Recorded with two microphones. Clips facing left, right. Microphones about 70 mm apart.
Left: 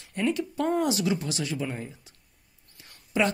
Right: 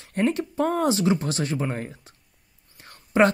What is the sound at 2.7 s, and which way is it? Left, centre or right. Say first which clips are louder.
Whispering: right 7 dB; right.